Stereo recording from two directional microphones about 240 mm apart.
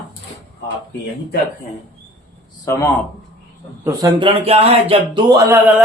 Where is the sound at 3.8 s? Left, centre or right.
Centre.